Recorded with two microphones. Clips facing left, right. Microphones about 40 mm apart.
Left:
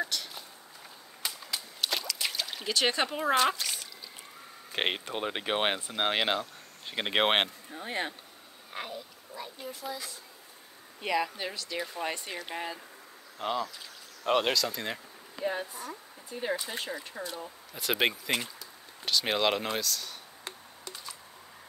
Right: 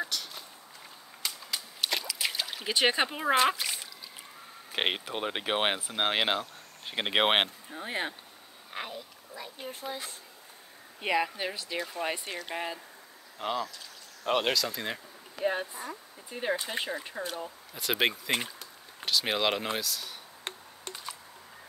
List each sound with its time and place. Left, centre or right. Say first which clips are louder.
0.0 s a sound: left 1 dB; centre
1.5 s a sound: right 1 dB; centre
2.7 s speech: right 2 dB; centre
4.7 s speech: right 1 dB; centre
9.6 s speech: right 1 dB; right
11.0 s speech: right 1 dB; centre
12.5 s speech: right 1 dB; centre
15.4 s speech: right 2 dB; right
17.7 s speech: even; centre
18.4 s a sound: right 2 dB; right
19.0 s speech: left 1 dB; centre
20.5 s a sound: right 3 dB; right